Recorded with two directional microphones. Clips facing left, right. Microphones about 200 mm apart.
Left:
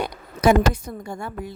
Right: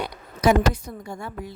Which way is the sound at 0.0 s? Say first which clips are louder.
Left 2 dB; 50° left (ahead or behind).